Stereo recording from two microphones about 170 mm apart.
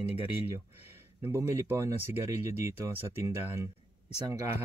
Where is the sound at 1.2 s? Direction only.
15° right (ahead or behind).